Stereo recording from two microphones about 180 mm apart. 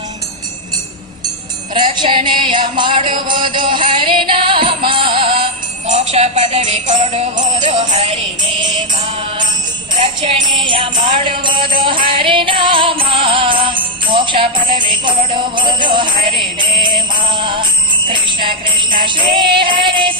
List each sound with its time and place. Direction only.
1.7 s music: 25° right (ahead or behind)
10.0 s jingle bell: 30° right (ahead or behind)